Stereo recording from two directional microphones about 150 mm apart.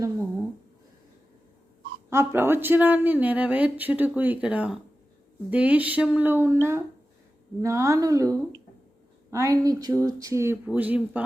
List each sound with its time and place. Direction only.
2.0 s speech: 15° right (ahead or behind)